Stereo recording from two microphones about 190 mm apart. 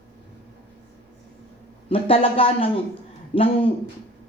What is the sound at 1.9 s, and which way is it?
A woman's voice, 30° left (ahead or behind).